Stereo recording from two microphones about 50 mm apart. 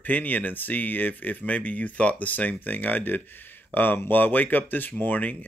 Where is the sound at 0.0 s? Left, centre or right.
Left.